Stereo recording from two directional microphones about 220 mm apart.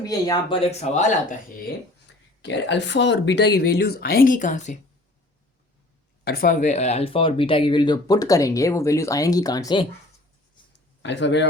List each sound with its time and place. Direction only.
0.0 s speech: 15° left (ahead or behind)
2.4 s speech: 55° left (ahead or behind); by 4.8 s 35° left (ahead or behind)
6.2 s speech: 40° left (ahead or behind); by 9.8 s 20° left (ahead or behind)
11.0 s speech: 55° left (ahead or behind)